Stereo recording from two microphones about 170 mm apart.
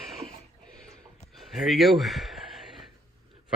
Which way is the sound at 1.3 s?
Centre (ahead or behind).